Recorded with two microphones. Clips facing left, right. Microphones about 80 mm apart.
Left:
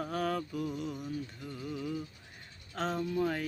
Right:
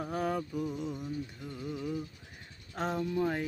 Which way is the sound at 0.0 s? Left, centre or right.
Centre.